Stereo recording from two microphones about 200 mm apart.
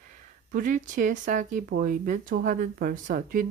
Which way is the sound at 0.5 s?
40° right (ahead or behind).